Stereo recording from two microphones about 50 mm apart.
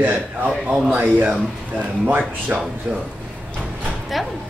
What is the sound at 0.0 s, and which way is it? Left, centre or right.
Speech, right.